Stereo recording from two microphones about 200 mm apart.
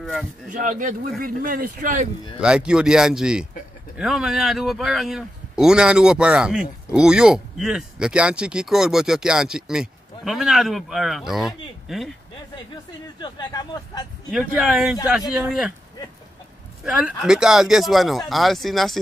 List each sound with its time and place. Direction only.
0.0 s speech: centre (ahead or behind)
0.5 s speech: 40° right (ahead or behind)
2.4 s a man's voice: 5° right (ahead or behind)
13.2 s speech: 20° left (ahead or behind)
14.3 s a man's voice: 5° right (ahead or behind)
16.8 s a man's voice: centre (ahead or behind)